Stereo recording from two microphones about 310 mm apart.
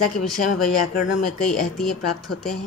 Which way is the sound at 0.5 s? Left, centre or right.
Left.